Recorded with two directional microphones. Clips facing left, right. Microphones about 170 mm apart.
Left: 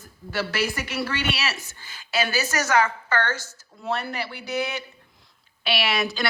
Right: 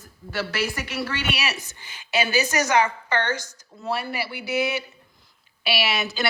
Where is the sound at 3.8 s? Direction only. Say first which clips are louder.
Even; 5° right (ahead or behind).